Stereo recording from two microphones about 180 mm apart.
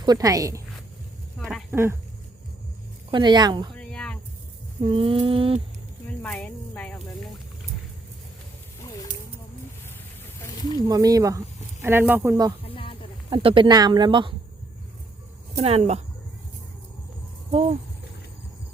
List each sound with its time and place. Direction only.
0.0 s speech: 20° right (ahead or behind)
1.4 s a sound: 5° left (ahead or behind)
1.7 s speech: 15° right (ahead or behind)
3.1 s speech: 25° right (ahead or behind)
3.8 s a sound: 5° left (ahead or behind)
4.8 s speech: 30° right (ahead or behind)
6.2 s a sound: 5° left (ahead or behind)
10.8 s speech: 20° right (ahead or behind)
12.6 s a sound: 30° left (ahead or behind)
13.3 s speech: 30° right (ahead or behind)
15.5 s speech: 40° right (ahead or behind)
17.5 s speech: 35° right (ahead or behind)